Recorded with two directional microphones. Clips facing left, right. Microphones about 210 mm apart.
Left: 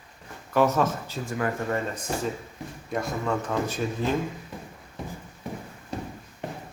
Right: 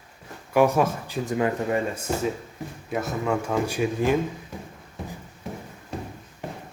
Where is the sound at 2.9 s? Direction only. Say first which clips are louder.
Right 2 dB; 5° right (ahead or behind).